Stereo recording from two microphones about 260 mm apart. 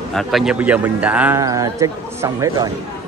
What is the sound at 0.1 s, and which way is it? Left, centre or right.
Speech, centre.